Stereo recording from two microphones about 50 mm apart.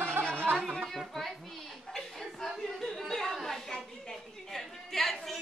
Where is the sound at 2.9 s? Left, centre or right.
Centre.